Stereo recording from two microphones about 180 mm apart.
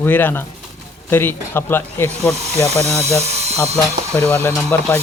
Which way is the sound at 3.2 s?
35° right (ahead or behind).